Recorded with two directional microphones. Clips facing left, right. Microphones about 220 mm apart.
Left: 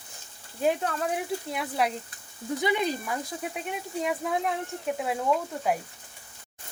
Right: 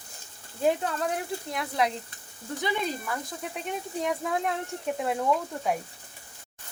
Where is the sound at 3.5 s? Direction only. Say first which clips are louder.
Right 2 dB; 5° left (ahead or behind).